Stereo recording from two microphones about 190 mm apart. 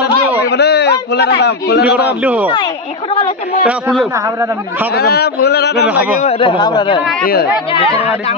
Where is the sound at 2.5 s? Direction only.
25° left (ahead or behind).